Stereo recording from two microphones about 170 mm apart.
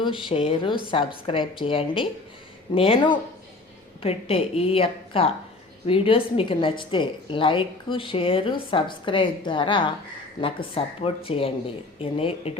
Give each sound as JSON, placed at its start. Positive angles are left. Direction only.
{"t": 0.0, "sound": "a woman's voice", "side_deg": 30}